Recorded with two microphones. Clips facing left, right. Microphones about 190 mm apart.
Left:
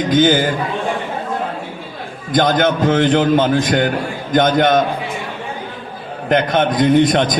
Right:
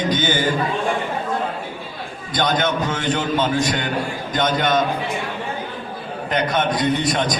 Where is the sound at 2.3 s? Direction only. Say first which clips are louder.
Left 6 dB; 50° left (ahead or behind).